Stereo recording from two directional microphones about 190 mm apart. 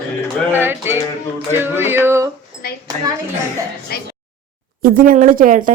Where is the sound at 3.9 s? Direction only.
55° left (ahead or behind).